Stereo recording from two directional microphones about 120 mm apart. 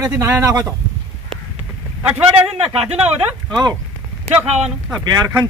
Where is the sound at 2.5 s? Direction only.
50° right (ahead or behind).